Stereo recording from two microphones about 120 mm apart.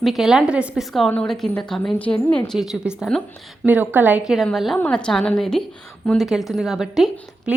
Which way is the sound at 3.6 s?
15° right (ahead or behind).